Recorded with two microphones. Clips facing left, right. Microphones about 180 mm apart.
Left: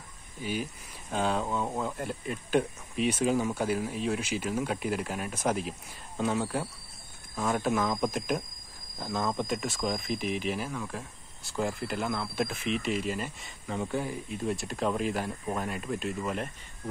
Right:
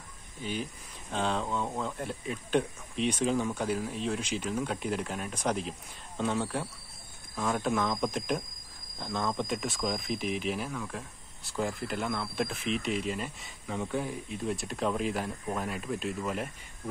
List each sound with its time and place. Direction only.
0.4 s speech: 5° left (ahead or behind)